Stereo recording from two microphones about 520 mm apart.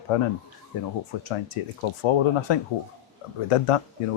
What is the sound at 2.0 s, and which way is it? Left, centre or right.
Speech, left.